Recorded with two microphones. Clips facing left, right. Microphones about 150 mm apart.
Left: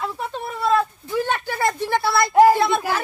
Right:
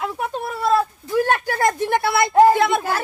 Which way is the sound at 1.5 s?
45° right (ahead or behind).